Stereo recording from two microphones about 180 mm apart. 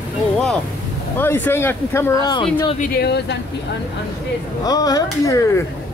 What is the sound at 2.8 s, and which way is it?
Speech, 60° left (ahead or behind).